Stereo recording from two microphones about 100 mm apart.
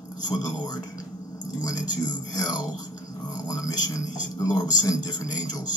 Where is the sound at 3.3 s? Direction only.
35° left (ahead or behind).